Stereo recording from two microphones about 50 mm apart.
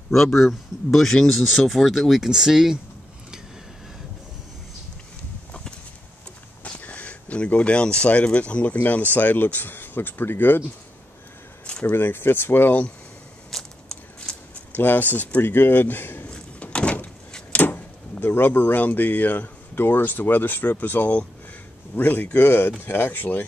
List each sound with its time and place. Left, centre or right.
0.1 s speech: centre
5.5 s a sound: centre
6.6 s speech: left
11.9 s speech: left
13.5 s a sound: centre
14.7 s speech: left
16.3 s power windows: centre
17.6 s a sound: left
18.2 s speech: left
19.8 s speech: left